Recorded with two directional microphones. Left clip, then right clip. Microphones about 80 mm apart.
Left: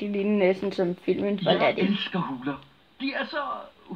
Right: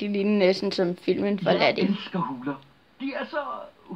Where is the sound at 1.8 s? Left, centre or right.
Left.